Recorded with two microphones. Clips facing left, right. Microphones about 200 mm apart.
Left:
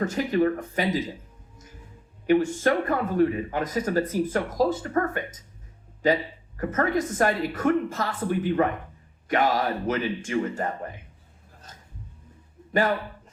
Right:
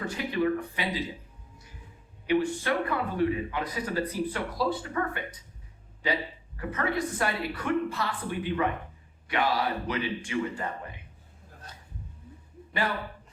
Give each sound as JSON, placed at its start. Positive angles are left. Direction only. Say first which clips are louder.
{"t": 0.0, "sound": "speech", "louder": "left 5 dB", "side_deg": 45}
{"t": 2.2, "sound": "speech", "louder": "left 5 dB", "side_deg": 45}